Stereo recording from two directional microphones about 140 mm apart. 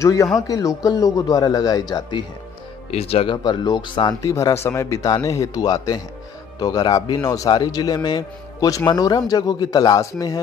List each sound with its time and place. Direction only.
0.0 s speech: 25° left (ahead or behind)
2.9 s speech: 45° left (ahead or behind)
4.3 s speech: 20° left (ahead or behind)